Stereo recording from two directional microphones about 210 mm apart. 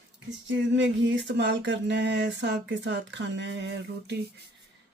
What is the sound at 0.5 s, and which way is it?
Speech, 60° right (ahead or behind).